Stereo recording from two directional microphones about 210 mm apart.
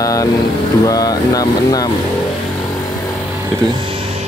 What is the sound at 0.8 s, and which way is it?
Speech, 15° left (ahead or behind).